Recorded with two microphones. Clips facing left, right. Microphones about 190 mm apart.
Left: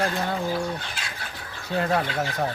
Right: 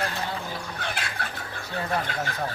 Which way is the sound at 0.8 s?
60° right (ahead or behind).